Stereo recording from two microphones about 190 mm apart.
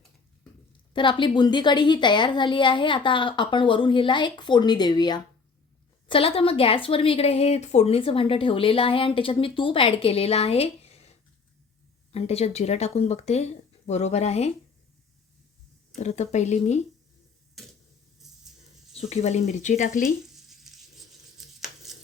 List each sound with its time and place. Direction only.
0.9 s speech: 25° left (ahead or behind)
12.1 s speech: 35° left (ahead or behind)
16.0 s speech: 35° left (ahead or behind)
18.9 s speech: 35° left (ahead or behind)
20.3 s tearing: centre (ahead or behind)